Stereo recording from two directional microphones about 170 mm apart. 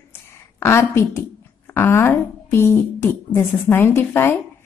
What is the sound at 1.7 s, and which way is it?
A woman's voice, 15° left (ahead or behind).